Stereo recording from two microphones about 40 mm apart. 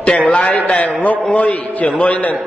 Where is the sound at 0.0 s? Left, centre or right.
Left.